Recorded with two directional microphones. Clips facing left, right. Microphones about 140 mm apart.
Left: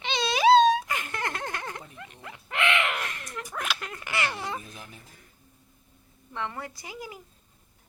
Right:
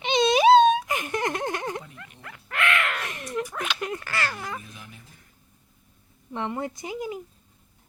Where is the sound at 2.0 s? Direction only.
20° left (ahead or behind).